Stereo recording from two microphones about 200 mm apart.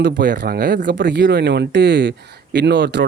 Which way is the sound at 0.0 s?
50° right (ahead or behind).